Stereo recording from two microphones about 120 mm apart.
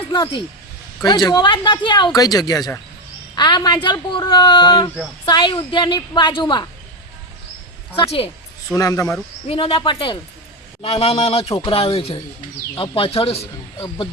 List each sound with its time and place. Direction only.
0.1 s a woman's voice: 40° left (ahead or behind)
8.7 s speech: 30° left (ahead or behind)
9.5 s speech: 50° left (ahead or behind)
13.7 s speech: 40° left (ahead or behind)